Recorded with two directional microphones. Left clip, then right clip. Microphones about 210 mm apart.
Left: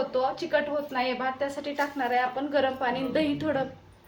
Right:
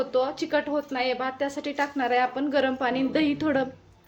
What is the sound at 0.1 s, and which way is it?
A woman's voice, 45° right (ahead or behind).